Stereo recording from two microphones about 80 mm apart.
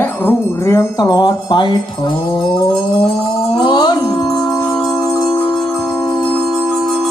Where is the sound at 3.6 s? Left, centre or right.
Left.